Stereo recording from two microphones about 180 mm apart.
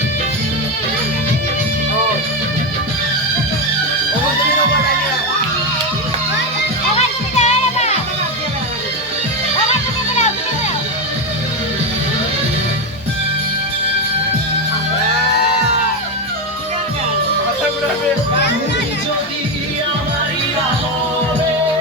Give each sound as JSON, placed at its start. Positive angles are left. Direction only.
{"t": 7.3, "sound": "music", "side_deg": 40}